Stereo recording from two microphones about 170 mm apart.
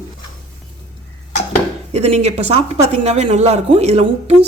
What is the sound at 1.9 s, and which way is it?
A woman's voice, 40° right (ahead or behind).